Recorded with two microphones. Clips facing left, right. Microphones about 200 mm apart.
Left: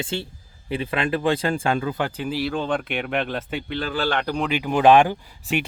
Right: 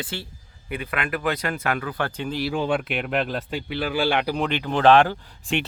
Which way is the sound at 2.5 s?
10° right (ahead or behind).